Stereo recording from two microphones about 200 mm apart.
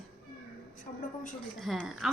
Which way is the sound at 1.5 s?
Centre (ahead or behind).